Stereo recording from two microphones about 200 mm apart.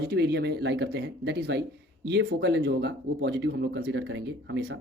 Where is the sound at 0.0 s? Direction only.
55° right (ahead or behind).